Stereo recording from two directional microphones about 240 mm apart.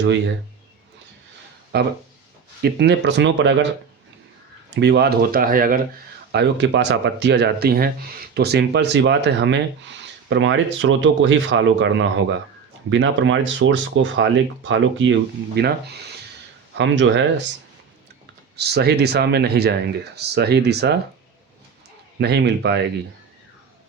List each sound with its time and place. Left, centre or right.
1.7 s speech: right
4.7 s speech: right
18.5 s speech: right
22.2 s speech: right